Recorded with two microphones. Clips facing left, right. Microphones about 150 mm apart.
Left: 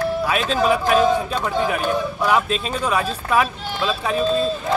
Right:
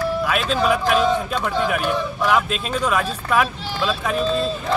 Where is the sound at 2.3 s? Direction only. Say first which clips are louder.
Even; centre (ahead or behind).